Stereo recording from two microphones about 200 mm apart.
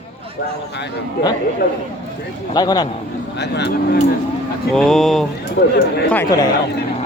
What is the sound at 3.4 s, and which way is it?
Speech, 55° left (ahead or behind).